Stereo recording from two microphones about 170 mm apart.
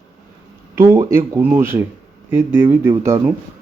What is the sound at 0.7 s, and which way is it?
Speech, 15° right (ahead or behind).